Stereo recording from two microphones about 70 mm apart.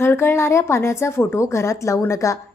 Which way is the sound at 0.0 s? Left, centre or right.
Left.